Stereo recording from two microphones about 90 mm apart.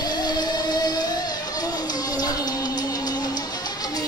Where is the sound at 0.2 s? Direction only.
50° left (ahead or behind).